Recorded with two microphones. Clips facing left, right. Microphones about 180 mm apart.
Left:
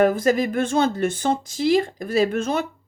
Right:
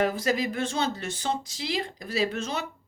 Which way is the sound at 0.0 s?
50° left (ahead or behind).